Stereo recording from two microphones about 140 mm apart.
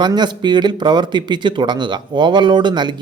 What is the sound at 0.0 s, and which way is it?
Speech, 30° right (ahead or behind).